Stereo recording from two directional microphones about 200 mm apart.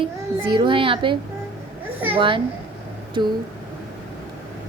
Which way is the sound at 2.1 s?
25° right (ahead or behind).